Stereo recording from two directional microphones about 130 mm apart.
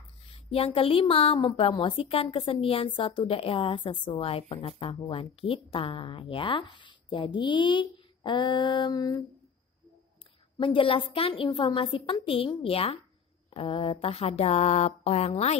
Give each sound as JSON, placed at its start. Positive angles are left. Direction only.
{"t": 0.3, "sound": "a woman's voice", "side_deg": 45}
{"t": 10.6, "sound": "a woman's voice", "side_deg": 40}